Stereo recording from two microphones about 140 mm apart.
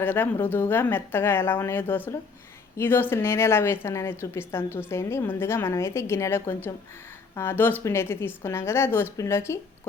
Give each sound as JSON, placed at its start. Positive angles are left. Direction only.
{"t": 0.0, "sound": "a woman's voice", "side_deg": 15}